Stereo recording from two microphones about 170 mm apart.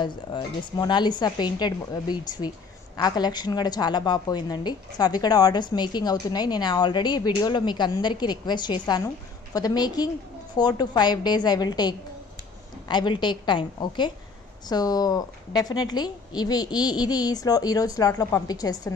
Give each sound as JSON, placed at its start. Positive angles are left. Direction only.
{"t": 0.0, "sound": "a woman's voice", "side_deg": 25}